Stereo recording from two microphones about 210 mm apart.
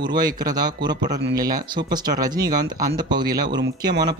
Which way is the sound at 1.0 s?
50° right (ahead or behind).